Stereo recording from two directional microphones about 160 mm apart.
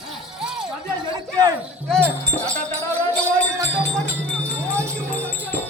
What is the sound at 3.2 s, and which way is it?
Music, 20° right (ahead or behind).